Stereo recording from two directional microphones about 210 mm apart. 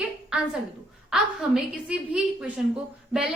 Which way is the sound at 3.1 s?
5° right (ahead or behind).